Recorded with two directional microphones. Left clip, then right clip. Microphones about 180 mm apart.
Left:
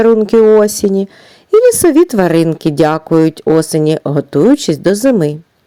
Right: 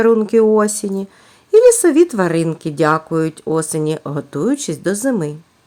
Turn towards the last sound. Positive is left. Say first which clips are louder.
# left 8 dB
turn(degrees=25)  # may be behind; listen again after turning